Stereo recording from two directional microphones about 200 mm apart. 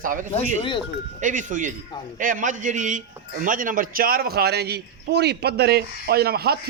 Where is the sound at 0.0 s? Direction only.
40° right (ahead or behind).